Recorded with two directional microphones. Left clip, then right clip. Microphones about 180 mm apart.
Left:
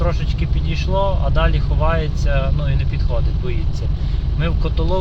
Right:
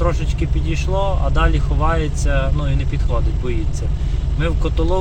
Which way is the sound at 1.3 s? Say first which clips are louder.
Right 1 dB; 65° right (ahead or behind).